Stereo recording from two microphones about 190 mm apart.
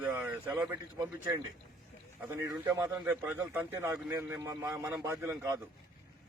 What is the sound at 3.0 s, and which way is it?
A man's voice, 10° right (ahead or behind).